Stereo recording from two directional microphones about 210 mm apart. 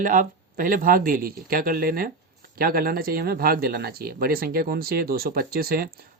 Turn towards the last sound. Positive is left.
turn(degrees=-45)  # may be behind; listen again after turning